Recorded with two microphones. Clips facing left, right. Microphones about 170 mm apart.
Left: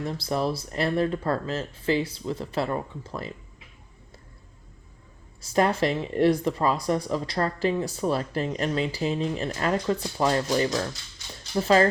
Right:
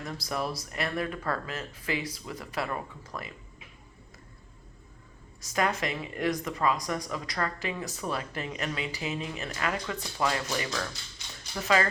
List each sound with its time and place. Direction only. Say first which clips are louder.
0.0 s speech: left 6 dB; 30° left (ahead or behind)
5.4 s speech: left 6 dB; 30° left (ahead or behind)